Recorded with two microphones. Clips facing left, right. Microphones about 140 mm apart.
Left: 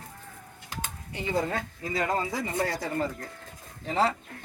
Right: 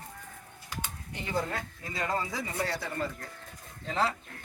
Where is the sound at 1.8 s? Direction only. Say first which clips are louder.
Left 4 dB; 25° left (ahead or behind).